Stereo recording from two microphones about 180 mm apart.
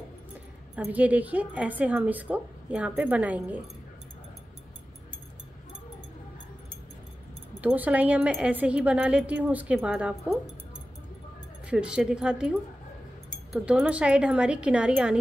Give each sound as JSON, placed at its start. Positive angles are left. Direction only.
{"t": 0.7, "sound": "speech", "side_deg": -10}
{"t": 7.6, "sound": "speech", "side_deg": -10}
{"t": 11.6, "sound": "speech", "side_deg": -5}